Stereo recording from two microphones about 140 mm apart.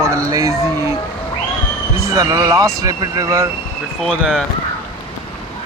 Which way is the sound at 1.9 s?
20° right (ahead or behind).